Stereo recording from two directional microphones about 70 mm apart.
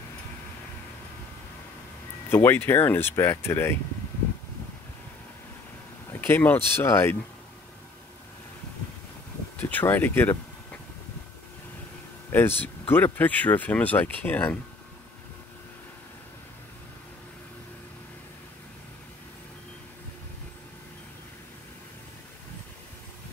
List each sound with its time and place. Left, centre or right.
2.2 s speech: left
6.1 s speech: left
9.6 s speech: left
12.3 s speech: left